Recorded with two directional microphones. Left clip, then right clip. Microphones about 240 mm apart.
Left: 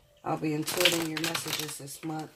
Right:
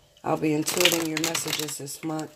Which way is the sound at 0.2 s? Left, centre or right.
Right.